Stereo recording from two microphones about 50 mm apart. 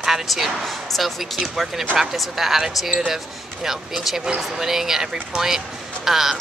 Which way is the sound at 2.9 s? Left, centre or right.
Centre.